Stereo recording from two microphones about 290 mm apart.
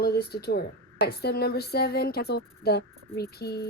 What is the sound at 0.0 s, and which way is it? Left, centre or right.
Speech, left.